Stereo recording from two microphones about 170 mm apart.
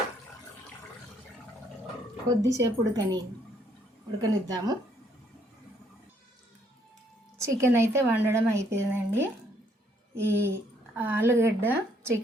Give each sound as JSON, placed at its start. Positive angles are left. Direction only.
{"t": 2.4, "sound": "a woman's voice", "side_deg": -20}
{"t": 4.2, "sound": "a woman's voice", "side_deg": -20}
{"t": 7.3, "sound": "a woman's voice", "side_deg": -15}